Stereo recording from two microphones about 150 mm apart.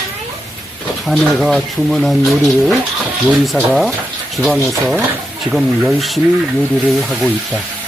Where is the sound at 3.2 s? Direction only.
Centre (ahead or behind).